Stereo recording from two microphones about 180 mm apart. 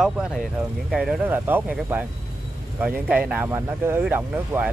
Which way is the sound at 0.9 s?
5° right (ahead or behind).